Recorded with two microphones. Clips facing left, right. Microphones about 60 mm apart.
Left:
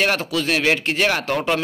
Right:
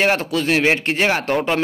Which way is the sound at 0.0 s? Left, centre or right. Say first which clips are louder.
Right 2 dB; right.